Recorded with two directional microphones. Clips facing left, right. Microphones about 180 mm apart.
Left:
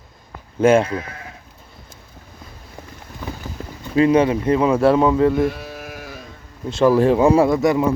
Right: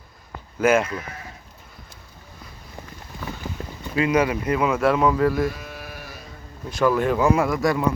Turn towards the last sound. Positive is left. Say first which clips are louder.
# left 6 dB
turn(degrees=20)  # may be behind; listen again after turning